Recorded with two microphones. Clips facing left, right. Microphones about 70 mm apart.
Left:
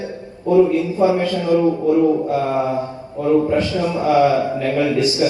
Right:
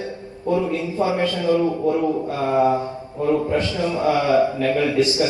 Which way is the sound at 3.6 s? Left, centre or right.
Left.